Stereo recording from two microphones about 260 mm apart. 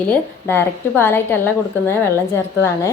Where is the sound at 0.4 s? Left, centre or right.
Centre.